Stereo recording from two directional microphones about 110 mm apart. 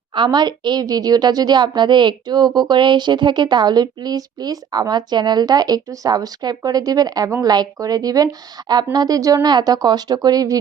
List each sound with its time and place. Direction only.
0.2 s speech: 40° right (ahead or behind)